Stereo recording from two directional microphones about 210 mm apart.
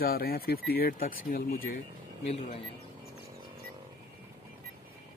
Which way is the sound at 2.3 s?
30° left (ahead or behind).